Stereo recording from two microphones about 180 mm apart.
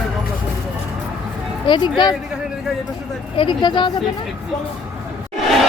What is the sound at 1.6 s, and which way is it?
Speech, 25° left (ahead or behind).